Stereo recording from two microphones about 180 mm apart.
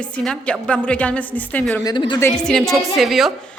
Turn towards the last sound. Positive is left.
turn(degrees=0)  # may be behind; listen again after turning